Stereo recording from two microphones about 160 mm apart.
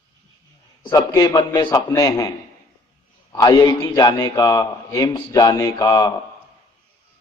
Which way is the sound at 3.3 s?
20° left (ahead or behind).